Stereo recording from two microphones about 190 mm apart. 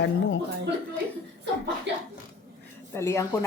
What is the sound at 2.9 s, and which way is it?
Speech, 15° left (ahead or behind).